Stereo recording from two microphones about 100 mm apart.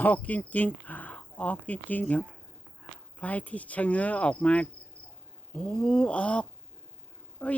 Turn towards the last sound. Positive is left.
turn(degrees=15)  # may be behind; listen again after turning